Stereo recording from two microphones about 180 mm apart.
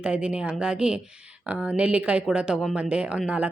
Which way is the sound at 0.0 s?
5° right (ahead or behind).